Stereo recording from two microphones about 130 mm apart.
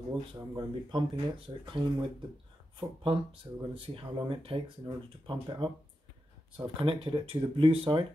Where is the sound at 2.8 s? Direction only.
40° right (ahead or behind).